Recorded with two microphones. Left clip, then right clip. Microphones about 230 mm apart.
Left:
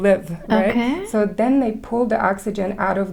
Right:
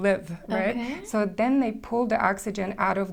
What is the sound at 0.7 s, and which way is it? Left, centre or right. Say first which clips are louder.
Speech: left 10 dB; left.